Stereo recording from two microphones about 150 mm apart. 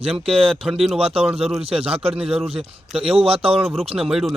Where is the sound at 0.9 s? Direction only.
40° right (ahead or behind).